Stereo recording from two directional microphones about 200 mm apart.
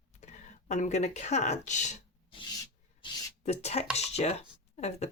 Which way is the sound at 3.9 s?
30° left (ahead or behind).